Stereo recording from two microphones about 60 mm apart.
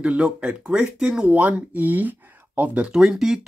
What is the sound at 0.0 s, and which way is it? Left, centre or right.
Speech, right.